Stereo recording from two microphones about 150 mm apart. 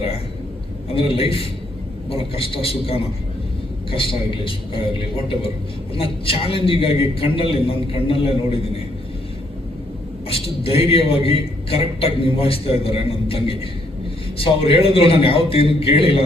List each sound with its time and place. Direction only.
0.9 s a man's voice: 40° left (ahead or behind)
10.2 s a man's voice: 40° left (ahead or behind)